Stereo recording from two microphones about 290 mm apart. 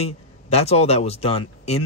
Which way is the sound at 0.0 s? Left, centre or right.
Left.